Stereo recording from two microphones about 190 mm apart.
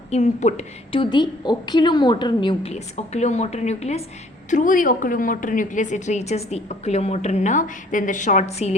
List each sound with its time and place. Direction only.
0.1 s a woman's voice: 35° left (ahead or behind)
1.1 s a woman's voice: 25° left (ahead or behind)